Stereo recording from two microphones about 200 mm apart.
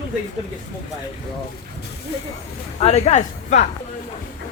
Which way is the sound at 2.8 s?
35° left (ahead or behind).